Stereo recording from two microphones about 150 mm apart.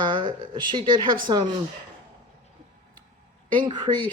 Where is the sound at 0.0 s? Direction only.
35° right (ahead or behind).